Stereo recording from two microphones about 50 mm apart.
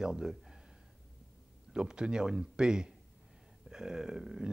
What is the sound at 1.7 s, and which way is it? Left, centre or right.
Speech, centre.